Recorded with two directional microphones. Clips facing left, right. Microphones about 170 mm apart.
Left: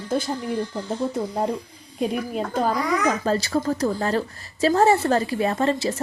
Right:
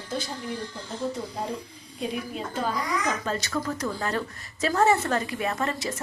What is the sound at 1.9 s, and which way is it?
A child's voice, 55° left (ahead or behind).